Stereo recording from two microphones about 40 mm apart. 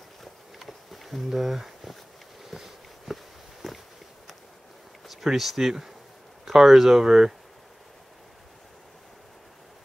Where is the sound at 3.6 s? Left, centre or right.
Centre.